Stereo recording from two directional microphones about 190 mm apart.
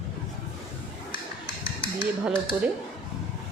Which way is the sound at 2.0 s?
5° right (ahead or behind).